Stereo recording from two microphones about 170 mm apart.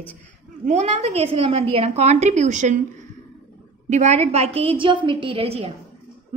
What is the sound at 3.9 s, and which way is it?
A woman's voice, 40° right (ahead or behind).